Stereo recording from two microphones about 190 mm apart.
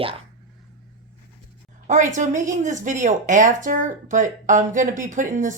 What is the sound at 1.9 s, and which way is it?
Speech, 40° right (ahead or behind).